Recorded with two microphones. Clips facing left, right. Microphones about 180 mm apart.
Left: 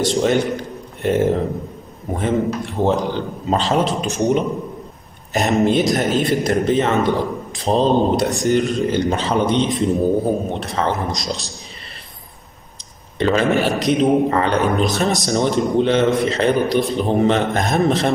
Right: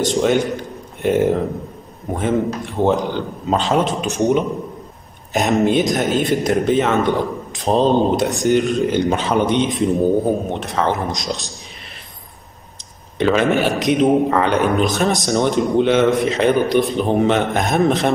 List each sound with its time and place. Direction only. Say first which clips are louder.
0.0 s a man's voice: right 1 dB; centre (ahead or behind)
13.2 s a man's voice: right 1 dB; centre (ahead or behind)